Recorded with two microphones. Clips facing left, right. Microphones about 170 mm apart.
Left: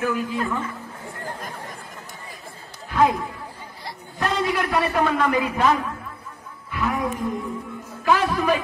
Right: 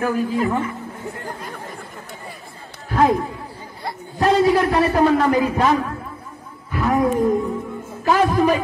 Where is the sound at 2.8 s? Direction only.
40° right (ahead or behind).